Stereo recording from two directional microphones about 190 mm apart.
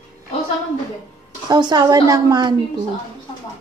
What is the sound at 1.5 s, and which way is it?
A woman's voice, 20° right (ahead or behind).